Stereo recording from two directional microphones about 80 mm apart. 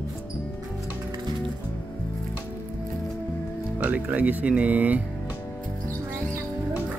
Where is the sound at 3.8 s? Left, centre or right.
Right.